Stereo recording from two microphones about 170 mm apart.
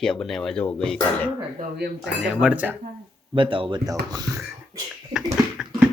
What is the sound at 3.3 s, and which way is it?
Speech, 30° right (ahead or behind).